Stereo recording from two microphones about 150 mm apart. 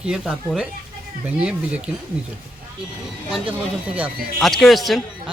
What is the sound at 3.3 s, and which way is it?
Speech, 10° right (ahead or behind).